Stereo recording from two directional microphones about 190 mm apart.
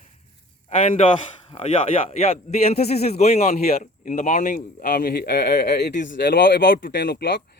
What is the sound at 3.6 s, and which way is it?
A man's voice, 45° left (ahead or behind).